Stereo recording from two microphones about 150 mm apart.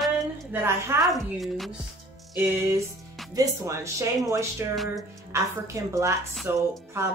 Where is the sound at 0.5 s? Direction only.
15° right (ahead or behind).